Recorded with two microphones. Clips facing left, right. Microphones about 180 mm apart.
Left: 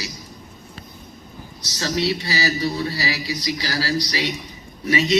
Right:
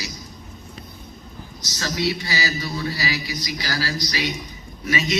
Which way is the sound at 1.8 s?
30° left (ahead or behind).